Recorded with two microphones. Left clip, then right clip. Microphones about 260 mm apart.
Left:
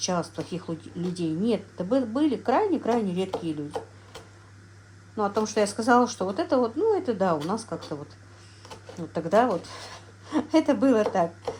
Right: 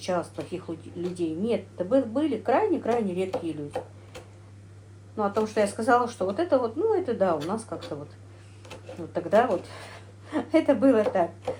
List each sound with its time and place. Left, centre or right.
0.0 s speech: left
5.1 s speech: left
9.1 s speech: left